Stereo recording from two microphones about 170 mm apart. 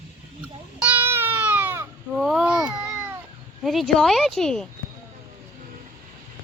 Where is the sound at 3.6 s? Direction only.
Centre (ahead or behind).